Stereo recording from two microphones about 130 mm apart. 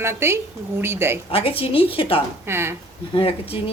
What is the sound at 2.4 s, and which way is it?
Speech, 20° right (ahead or behind).